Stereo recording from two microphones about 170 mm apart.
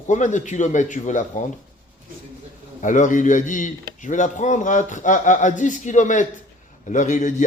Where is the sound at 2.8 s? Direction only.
50° left (ahead or behind).